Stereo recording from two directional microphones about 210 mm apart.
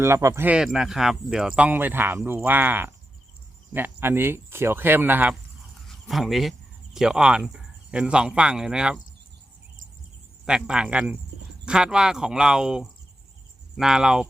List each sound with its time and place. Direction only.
0.0 s speech: 15° right (ahead or behind)
10.4 s speech: 5° right (ahead or behind)